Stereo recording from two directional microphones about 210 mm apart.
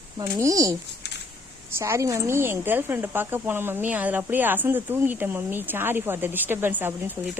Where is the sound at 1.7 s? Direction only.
10° right (ahead or behind).